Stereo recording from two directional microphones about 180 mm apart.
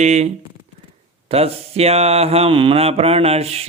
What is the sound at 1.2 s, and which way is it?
Speech, 35° right (ahead or behind).